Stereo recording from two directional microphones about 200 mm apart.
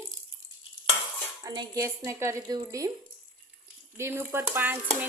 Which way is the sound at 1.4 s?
20° right (ahead or behind).